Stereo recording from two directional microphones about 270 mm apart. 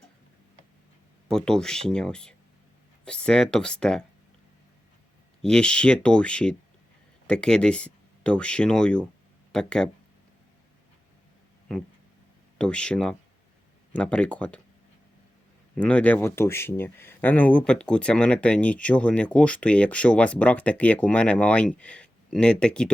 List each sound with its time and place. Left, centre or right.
1.3 s speech: centre
5.4 s speech: centre
12.5 s speech: centre
15.7 s speech: centre